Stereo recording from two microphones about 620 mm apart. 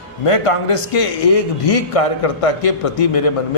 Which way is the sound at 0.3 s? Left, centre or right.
Left.